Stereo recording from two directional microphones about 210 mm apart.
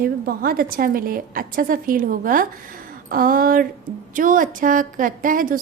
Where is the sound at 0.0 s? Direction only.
45° right (ahead or behind).